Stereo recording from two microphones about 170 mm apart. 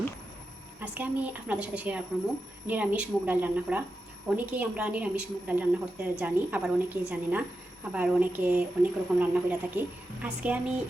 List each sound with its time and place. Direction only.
0.8 s a woman's voice: 10° right (ahead or behind)